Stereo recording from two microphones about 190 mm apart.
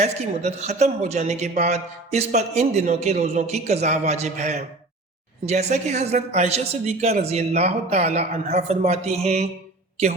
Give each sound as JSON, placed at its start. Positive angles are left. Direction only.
{"t": 0.0, "sound": "a man's voice", "side_deg": -35}